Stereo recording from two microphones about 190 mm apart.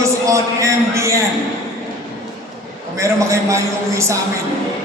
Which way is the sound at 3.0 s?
15° right (ahead or behind).